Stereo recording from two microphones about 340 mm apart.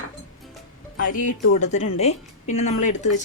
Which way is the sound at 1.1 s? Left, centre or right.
Left.